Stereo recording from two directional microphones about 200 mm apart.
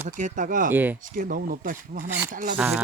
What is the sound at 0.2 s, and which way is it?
Speech, 40° right (ahead or behind).